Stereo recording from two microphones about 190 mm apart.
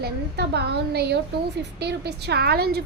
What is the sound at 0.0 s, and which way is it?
A woman's voice, 60° right (ahead or behind).